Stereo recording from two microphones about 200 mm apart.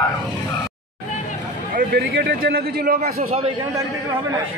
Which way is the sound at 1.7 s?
50° right (ahead or behind).